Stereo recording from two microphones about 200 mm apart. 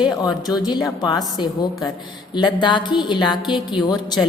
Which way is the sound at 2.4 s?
20° left (ahead or behind).